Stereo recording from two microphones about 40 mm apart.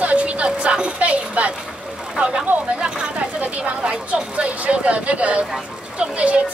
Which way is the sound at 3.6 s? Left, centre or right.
Right.